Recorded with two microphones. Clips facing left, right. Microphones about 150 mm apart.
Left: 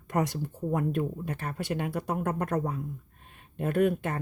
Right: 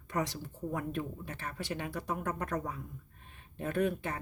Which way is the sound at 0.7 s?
45° left (ahead or behind).